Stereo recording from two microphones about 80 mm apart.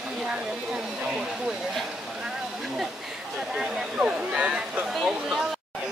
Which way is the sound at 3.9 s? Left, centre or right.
Centre.